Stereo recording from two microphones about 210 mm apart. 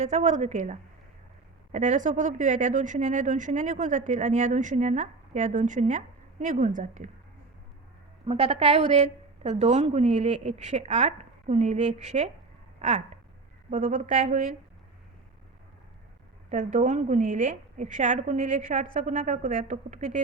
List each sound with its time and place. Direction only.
0.0 s speech: 35° right (ahead or behind)
8.3 s speech: 30° right (ahead or behind)
16.5 s speech: 35° right (ahead or behind)